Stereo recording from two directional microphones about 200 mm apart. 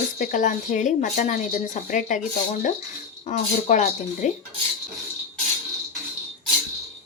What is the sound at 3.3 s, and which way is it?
Speech, 40° left (ahead or behind).